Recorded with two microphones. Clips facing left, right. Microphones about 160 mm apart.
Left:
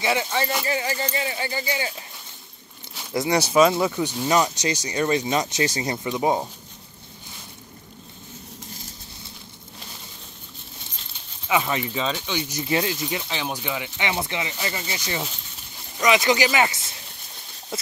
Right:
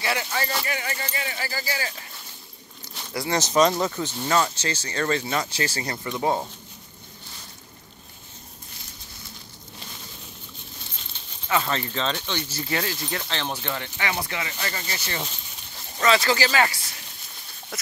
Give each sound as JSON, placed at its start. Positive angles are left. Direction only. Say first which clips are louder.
{"t": 0.0, "sound": "speech", "louder": "left 4 dB", "side_deg": 20}
{"t": 3.1, "sound": "speech", "louder": "left 4 dB", "side_deg": 15}
{"t": 11.4, "sound": "speech", "louder": "left 2 dB", "side_deg": 10}